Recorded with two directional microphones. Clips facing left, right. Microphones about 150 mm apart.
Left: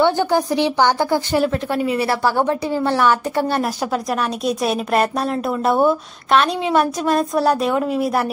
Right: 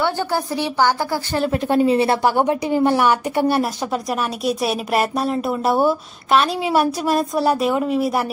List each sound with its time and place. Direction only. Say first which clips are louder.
0.0 s a woman's voice: left 5 dB; 15° left (ahead or behind)
1.8 s a woman's voice: right 4 dB; 25° right (ahead or behind); by 3.6 s 10° right (ahead or behind)
3.6 s speech: left 1 dB; centre (ahead or behind)